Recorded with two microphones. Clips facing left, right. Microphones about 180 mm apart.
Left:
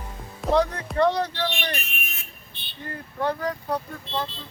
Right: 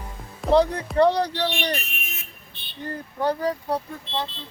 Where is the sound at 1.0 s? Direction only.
35° right (ahead or behind).